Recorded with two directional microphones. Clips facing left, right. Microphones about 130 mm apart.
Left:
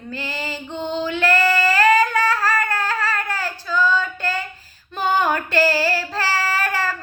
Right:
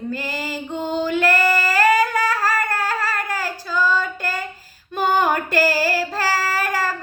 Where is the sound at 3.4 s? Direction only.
10° right (ahead or behind).